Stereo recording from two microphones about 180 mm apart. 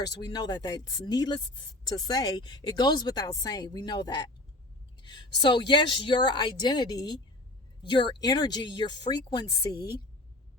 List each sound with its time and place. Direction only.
0.0 s speech: 25° left (ahead or behind)